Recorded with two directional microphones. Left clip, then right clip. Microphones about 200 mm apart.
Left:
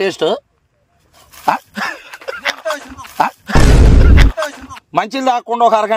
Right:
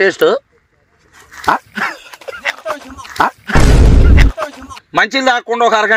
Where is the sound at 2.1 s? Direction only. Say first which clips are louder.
Left 2 dB; 40° right (ahead or behind).